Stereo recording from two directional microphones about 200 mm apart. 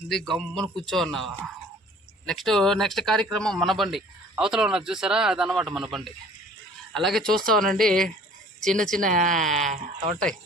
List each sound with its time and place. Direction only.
0.1 s speech: centre (ahead or behind)
9.0 s speech: 40° right (ahead or behind)
9.3 s speech: centre (ahead or behind)